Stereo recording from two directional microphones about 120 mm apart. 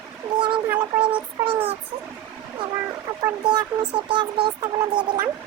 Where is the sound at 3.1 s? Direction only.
25° right (ahead or behind).